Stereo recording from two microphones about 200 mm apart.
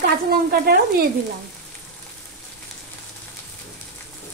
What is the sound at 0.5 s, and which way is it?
Stir, 50° right (ahead or behind).